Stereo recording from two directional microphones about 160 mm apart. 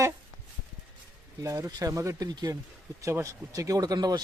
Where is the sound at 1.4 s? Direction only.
20° right (ahead or behind).